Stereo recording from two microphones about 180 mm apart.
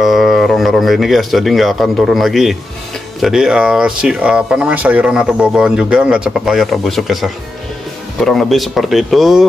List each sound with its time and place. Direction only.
0.0 s speech: centre (ahead or behind)